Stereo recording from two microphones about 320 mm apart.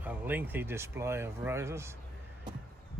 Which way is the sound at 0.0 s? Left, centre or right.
Centre.